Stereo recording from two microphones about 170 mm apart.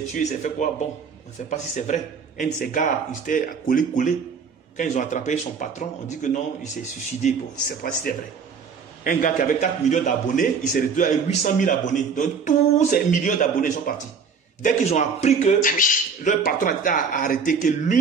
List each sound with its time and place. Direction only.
0.2 s a man's voice: 45° left (ahead or behind)
9.0 s a man's voice: 55° left (ahead or behind)